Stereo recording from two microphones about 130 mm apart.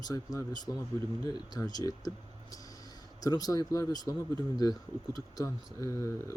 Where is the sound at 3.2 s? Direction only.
30° left (ahead or behind).